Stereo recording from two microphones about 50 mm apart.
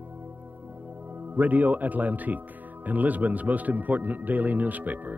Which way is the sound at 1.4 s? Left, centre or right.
Right.